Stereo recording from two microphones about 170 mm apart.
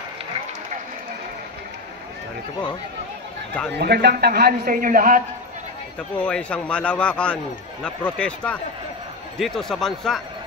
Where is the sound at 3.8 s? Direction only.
70° right (ahead or behind); by 5.2 s 55° right (ahead or behind).